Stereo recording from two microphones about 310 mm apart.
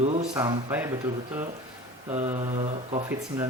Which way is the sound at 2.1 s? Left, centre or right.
Centre.